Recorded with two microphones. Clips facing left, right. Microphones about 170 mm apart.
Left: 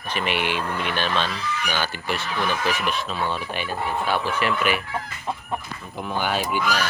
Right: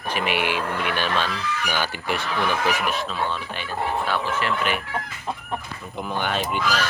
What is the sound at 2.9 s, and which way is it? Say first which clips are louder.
Speech: even; centre (ahead or behind).